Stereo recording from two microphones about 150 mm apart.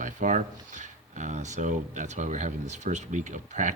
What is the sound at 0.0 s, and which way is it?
Speech, 55° right (ahead or behind).